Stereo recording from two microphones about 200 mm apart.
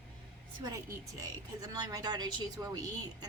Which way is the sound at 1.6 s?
20° right (ahead or behind).